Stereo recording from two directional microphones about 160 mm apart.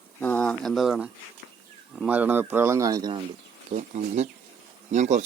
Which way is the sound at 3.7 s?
45° right (ahead or behind).